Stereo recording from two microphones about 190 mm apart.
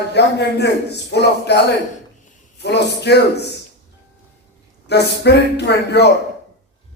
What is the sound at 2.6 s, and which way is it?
Speech, 60° left (ahead or behind).